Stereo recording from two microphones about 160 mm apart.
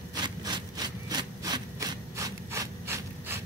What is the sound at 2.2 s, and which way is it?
Wood, 20° right (ahead or behind).